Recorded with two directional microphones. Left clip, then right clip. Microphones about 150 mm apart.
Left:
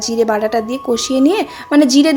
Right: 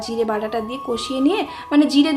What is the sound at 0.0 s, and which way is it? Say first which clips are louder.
A woman's voice: left 7 dB; 40° left (ahead or behind).